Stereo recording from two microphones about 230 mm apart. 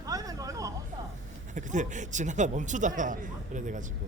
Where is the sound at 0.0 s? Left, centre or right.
Centre.